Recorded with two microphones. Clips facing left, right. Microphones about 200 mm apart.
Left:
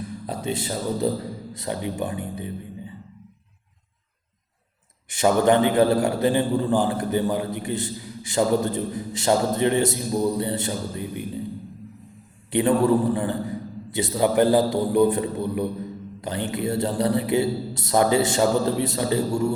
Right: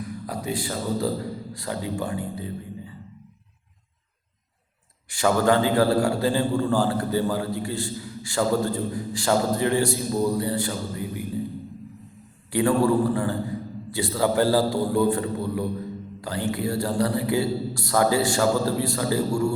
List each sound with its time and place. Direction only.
0.0 s a man's voice: 25° left (ahead or behind)
5.0 s a man's voice: 20° left (ahead or behind)
12.5 s a man's voice: 20° left (ahead or behind)